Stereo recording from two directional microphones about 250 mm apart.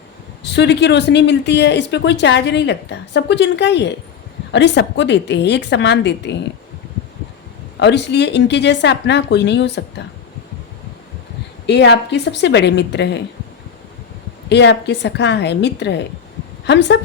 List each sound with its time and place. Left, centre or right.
0.4 s speech: left
7.8 s speech: left
11.6 s speech: left
14.5 s speech: left